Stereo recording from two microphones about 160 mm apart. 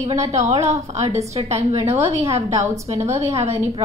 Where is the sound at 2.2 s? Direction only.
20° right (ahead or behind).